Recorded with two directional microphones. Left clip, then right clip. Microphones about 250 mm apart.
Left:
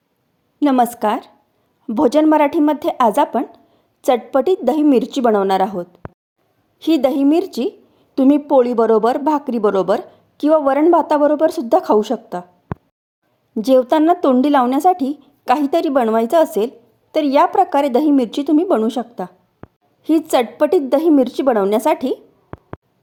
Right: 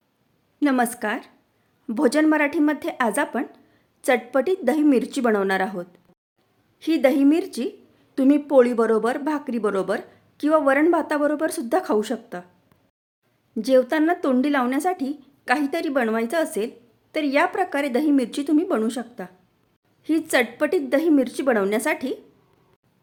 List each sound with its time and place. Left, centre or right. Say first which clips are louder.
0.6 s speech: left 7 dB; centre
13.6 s speech: left 6 dB; centre